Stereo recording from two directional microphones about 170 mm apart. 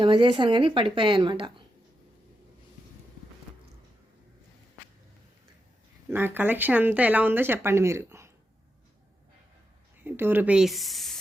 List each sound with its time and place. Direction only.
0.0 s a woman's voice: 30° right (ahead or behind)
6.1 s speech: 10° right (ahead or behind)
10.0 s speech: 10° right (ahead or behind)